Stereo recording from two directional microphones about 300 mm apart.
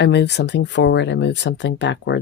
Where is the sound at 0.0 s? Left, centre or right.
Left.